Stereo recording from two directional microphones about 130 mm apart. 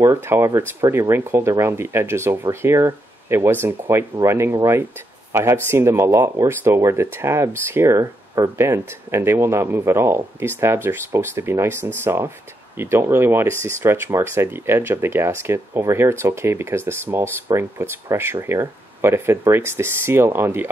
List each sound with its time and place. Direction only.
0.0 s speech: 20° right (ahead or behind)